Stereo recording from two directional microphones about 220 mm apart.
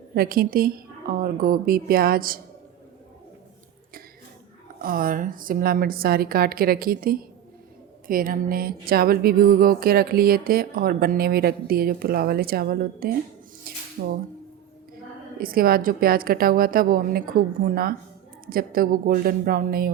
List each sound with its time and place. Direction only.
0.1 s a woman's voice: 45° right (ahead or behind)
4.8 s a woman's voice: 40° right (ahead or behind)
8.0 s a sound: 40° right (ahead or behind)
13.7 s music: 40° right (ahead or behind)
15.4 s a woman's voice: 40° right (ahead or behind)